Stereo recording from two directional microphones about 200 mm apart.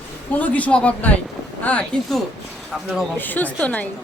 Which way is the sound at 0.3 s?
5° left (ahead or behind).